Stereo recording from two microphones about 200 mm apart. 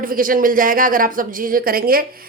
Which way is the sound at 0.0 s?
45° right (ahead or behind).